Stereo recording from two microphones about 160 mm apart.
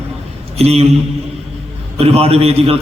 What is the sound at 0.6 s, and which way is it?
Speech, 40° right (ahead or behind).